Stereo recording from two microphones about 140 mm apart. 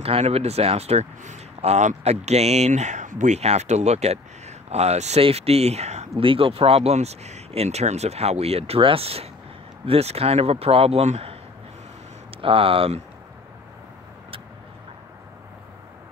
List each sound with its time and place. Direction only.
0.0 s speech: 45° right (ahead or behind)
6.2 s speech: 40° right (ahead or behind)
12.4 s speech: 40° right (ahead or behind)